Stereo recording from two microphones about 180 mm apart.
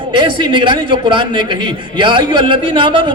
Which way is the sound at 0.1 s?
25° right (ahead or behind).